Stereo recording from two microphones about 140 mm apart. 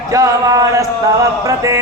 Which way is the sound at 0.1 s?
25° right (ahead or behind).